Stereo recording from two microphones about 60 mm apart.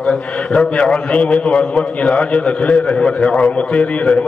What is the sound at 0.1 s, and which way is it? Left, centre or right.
A man's voice, centre.